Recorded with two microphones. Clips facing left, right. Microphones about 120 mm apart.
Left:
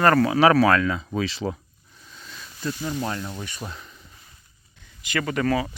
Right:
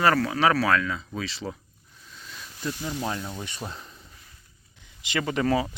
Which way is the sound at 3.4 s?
25° right (ahead or behind).